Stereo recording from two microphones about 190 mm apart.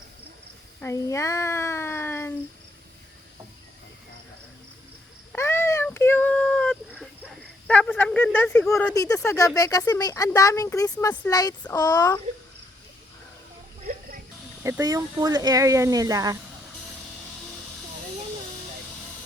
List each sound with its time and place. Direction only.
0.8 s speech: 15° left (ahead or behind)
5.3 s a sound: 10° left (ahead or behind)
7.7 s speech: 10° left (ahead or behind)
11.3 s speech: 20° left (ahead or behind)
14.6 s speech: 15° right (ahead or behind)